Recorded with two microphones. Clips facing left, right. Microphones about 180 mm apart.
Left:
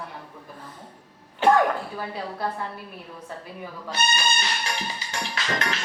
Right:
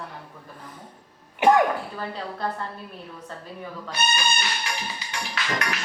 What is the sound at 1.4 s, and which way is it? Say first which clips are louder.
Speech: right 1 dB; 15° right (ahead or behind).